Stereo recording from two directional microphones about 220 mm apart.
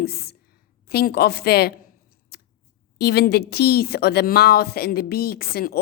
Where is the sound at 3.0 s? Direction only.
45° left (ahead or behind).